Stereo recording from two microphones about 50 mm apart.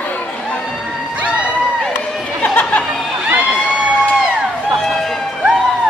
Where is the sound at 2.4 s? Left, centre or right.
Left.